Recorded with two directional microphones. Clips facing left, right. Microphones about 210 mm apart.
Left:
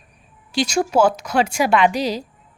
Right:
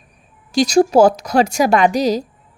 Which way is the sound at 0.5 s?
40° right (ahead or behind).